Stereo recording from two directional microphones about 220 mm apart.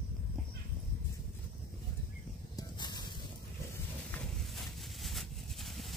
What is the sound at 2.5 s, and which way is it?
Stir, 20° left (ahead or behind).